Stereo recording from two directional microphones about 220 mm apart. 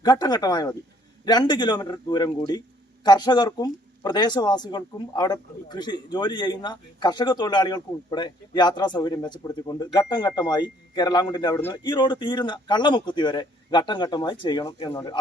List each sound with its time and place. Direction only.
0.0 s a man's voice: 20° left (ahead or behind)